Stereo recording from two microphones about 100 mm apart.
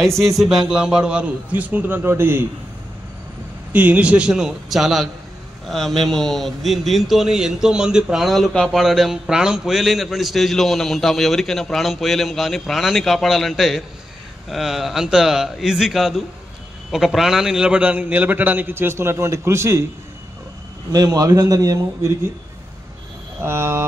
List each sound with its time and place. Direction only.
0.0 s a man's voice: centre (ahead or behind); by 2.4 s 25° right (ahead or behind)
3.7 s a man's voice: 15° right (ahead or behind)
20.9 s a man's voice: 40° right (ahead or behind)
23.4 s speech: 25° right (ahead or behind)